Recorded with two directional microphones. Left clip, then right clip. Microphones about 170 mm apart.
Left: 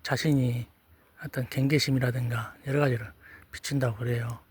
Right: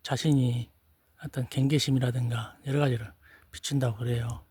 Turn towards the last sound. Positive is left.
turn(degrees=-55)  # may be behind; listen again after turning